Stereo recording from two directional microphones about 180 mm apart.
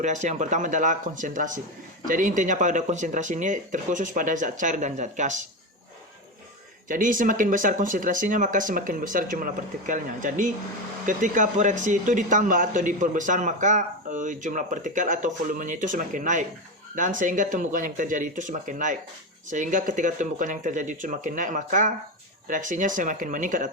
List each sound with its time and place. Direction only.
0.0 s speech: 40° right (ahead or behind)
6.8 s speech: 45° right (ahead or behind)